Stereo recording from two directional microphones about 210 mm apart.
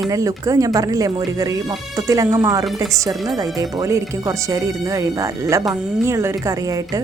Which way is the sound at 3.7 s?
15° right (ahead or behind).